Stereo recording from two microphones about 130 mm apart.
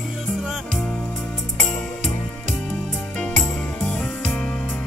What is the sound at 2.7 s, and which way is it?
Music, 5° left (ahead or behind).